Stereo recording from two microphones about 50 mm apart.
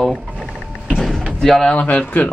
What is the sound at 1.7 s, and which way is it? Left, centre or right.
Speech, left.